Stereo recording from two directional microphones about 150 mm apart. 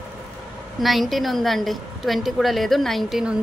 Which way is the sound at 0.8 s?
Centre (ahead or behind).